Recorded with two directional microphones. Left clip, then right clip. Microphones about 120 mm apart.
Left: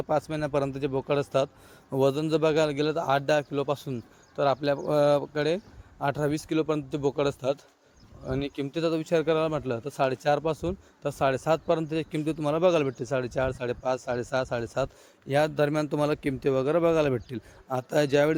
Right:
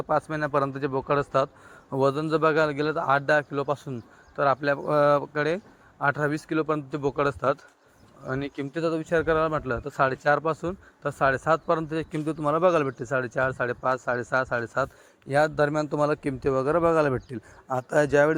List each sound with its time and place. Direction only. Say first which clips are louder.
0.1 s a man's voice: right 3 dB; 20° left (ahead or behind)